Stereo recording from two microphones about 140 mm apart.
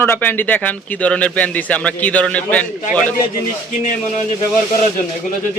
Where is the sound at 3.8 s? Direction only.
60° left (ahead or behind).